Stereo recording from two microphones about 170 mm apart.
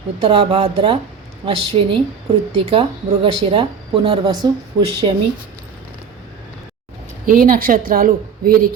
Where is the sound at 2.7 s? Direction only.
30° right (ahead or behind).